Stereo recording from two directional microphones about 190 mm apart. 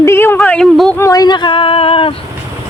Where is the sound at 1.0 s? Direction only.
15° left (ahead or behind).